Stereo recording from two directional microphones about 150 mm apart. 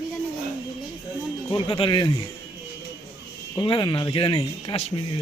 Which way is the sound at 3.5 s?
35° left (ahead or behind).